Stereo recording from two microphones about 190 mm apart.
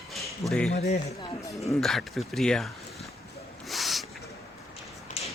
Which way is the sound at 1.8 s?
Centre (ahead or behind).